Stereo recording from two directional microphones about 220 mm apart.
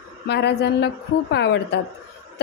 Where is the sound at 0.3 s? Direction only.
50° left (ahead or behind).